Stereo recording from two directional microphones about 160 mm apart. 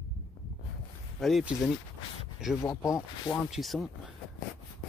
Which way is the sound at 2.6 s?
20° left (ahead or behind).